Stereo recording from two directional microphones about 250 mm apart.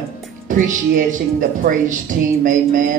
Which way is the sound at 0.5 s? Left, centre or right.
Right.